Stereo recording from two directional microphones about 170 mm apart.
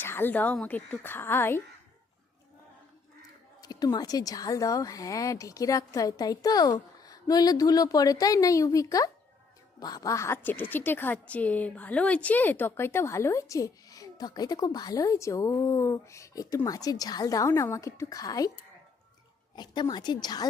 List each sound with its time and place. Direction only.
0.0 s speech: 15° left (ahead or behind)
3.6 s speech: 20° left (ahead or behind)
19.5 s speech: 25° left (ahead or behind)